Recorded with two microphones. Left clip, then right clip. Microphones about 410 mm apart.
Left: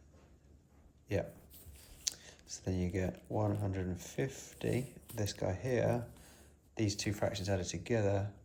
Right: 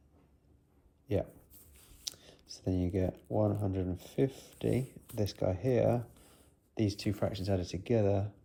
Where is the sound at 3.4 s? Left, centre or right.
Right.